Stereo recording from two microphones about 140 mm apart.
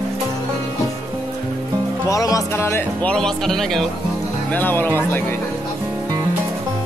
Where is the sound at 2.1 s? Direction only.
25° left (ahead or behind).